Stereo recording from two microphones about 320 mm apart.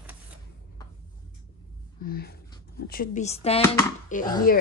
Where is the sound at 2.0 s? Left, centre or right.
Left.